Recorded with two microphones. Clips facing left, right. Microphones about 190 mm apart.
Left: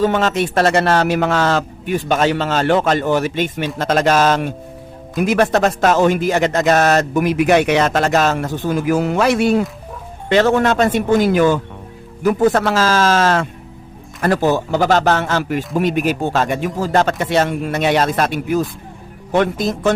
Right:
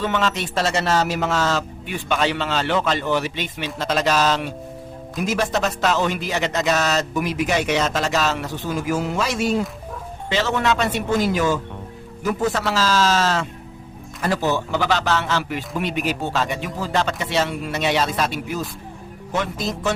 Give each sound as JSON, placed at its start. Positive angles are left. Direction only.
{"t": 0.0, "sound": "a man's voice", "side_deg": 45}
{"t": 5.1, "sound": "a man's voice", "side_deg": 60}